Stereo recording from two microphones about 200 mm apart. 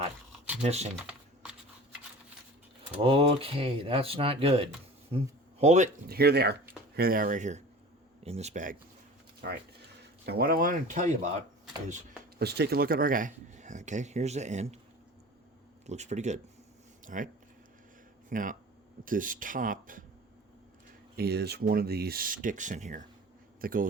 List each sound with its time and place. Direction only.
0.6 s speech: 35° right (ahead or behind)
3.0 s speech: 30° right (ahead or behind)
6.1 s speech: 50° right (ahead or behind); by 8.7 s 35° right (ahead or behind)
9.4 s speech: 50° right (ahead or behind)
12.4 s speech: 55° right (ahead or behind); by 14.8 s 35° right (ahead or behind)
15.9 s speech: 35° right (ahead or behind)
18.3 s speech: 40° right (ahead or behind)
21.2 s speech: 55° right (ahead or behind)